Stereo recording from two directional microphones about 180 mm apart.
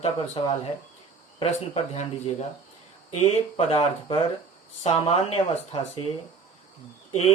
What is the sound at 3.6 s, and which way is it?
Speech, 35° left (ahead or behind).